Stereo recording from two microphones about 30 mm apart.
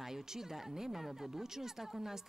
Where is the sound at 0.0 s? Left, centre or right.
Centre.